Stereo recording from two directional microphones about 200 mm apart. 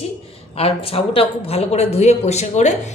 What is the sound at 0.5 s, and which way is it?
A woman's voice, 30° left (ahead or behind).